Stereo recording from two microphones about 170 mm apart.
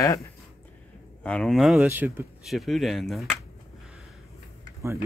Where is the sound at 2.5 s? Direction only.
Centre (ahead or behind).